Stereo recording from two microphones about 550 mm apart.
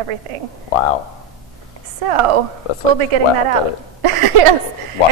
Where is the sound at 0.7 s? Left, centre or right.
Left.